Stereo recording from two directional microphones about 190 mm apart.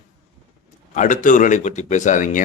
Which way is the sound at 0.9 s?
40° left (ahead or behind).